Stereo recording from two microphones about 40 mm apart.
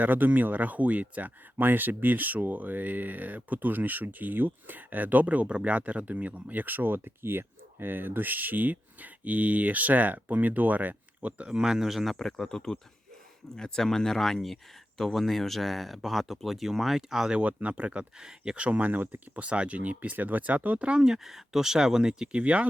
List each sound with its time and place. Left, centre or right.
0.0 s speech: right
1.5 s speech: right
11.4 s speech: centre
11.9 s speech: centre
12.2 s speech: centre
17.3 s speech: right
18.2 s speech: centre
18.5 s speech: right
19.5 s speech: right
21.2 s speech: centre
22.3 s speech: right